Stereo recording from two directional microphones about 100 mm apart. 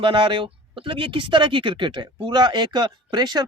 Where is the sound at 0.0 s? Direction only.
55° right (ahead or behind).